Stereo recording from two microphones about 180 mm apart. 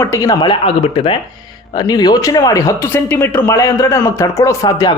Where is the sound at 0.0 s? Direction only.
15° left (ahead or behind).